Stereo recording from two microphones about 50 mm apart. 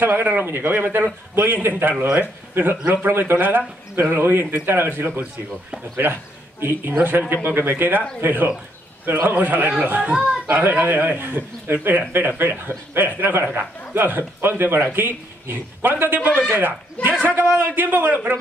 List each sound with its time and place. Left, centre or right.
0.0 s speech: right
6.0 s a man's voice: right
17.5 s a man's voice: right